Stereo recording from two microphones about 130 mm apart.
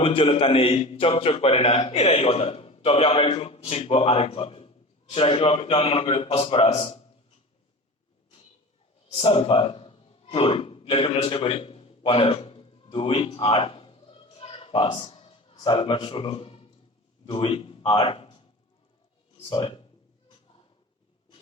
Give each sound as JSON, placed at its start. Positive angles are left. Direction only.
{"t": 0.0, "sound": "a man's voice", "side_deg": 45}
{"t": 9.1, "sound": "gasp", "side_deg": 45}
{"t": 15.5, "sound": "a man's voice", "side_deg": 40}